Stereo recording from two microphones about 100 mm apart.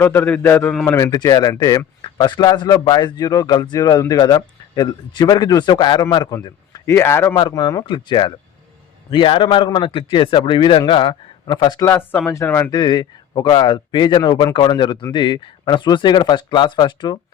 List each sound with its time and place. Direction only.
0.0 s a man's voice: 20° left (ahead or behind)
0.9 s speech: 35° left (ahead or behind)
2.0 s a man's voice: 50° left (ahead or behind)
6.9 s a man's voice: 25° left (ahead or behind)
7.9 s a man's voice: 50° left (ahead or behind)
11.9 s a man's voice: 20° left (ahead or behind)
12.7 s speech: 45° left (ahead or behind)